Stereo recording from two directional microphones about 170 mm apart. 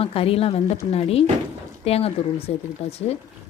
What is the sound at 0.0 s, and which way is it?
Speech, 35° left (ahead or behind).